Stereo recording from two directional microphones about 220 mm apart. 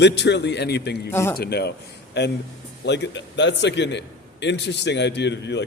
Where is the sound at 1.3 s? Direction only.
45° left (ahead or behind).